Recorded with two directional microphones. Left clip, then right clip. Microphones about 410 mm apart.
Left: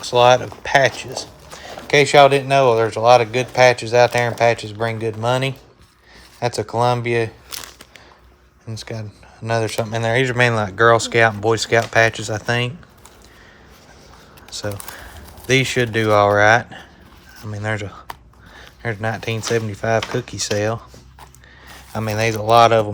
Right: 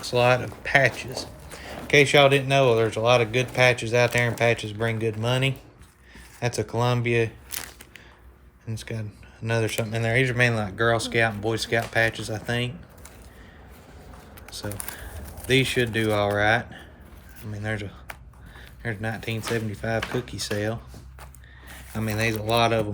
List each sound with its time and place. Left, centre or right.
0.0 s speech: centre
6.4 s a sound: centre
8.7 s speech: centre
14.5 s speech: centre
21.9 s speech: centre